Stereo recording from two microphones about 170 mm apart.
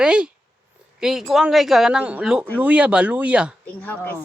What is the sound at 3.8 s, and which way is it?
Speech, 10° left (ahead or behind).